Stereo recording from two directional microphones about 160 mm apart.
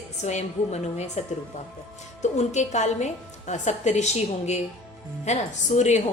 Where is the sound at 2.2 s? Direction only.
45° left (ahead or behind).